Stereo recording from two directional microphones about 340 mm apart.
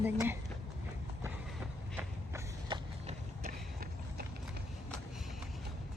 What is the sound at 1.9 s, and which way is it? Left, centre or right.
Run, centre.